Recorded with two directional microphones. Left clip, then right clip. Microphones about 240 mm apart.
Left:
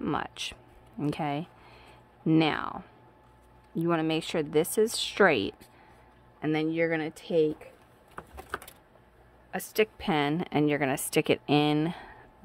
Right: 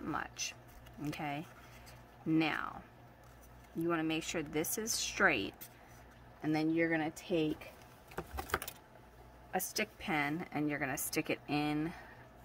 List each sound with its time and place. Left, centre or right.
0.0 s a sound: left
1.0 s speech: left
3.8 s speech: left
6.4 s speech: left
9.5 s speech: left